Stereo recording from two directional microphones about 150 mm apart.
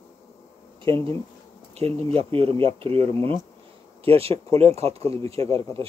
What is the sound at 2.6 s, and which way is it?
Speech, 40° right (ahead or behind).